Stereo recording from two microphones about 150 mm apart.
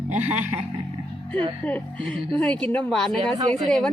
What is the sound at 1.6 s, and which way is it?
Speech, 10° left (ahead or behind).